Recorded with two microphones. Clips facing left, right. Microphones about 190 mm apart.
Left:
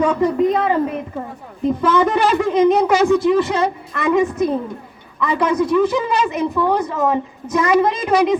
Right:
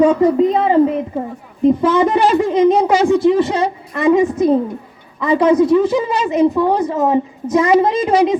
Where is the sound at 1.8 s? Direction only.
20° right (ahead or behind).